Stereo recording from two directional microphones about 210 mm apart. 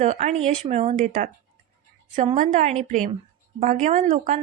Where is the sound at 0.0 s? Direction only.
30° right (ahead or behind).